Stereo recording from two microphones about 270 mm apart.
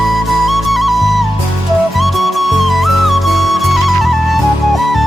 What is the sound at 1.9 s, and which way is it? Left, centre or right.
Music, centre.